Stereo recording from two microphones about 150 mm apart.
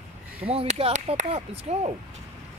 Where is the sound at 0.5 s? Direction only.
40° right (ahead or behind).